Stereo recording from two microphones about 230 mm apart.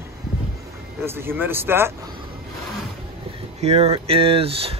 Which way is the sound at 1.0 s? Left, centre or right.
Centre.